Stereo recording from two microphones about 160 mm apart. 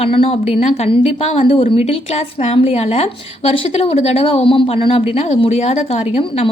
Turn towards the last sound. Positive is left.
turn(degrees=40)  # may be behind; listen again after turning